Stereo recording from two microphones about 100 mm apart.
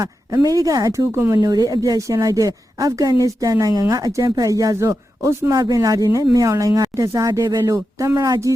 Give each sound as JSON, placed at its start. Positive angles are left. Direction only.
{"t": 0.3, "sound": "a woman's voice", "side_deg": -35}
{"t": 1.5, "sound": "a woman's voice", "side_deg": -40}